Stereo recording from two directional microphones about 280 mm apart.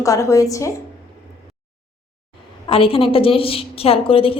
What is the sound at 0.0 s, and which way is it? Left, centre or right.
Speech, centre.